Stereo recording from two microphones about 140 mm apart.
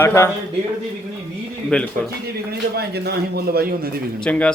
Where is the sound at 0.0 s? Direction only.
15° left (ahead or behind).